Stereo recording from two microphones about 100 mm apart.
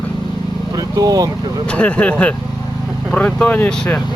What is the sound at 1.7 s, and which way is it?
Speech, 15° left (ahead or behind).